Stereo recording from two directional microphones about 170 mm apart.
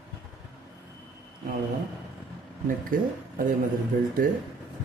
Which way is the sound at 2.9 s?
55° right (ahead or behind).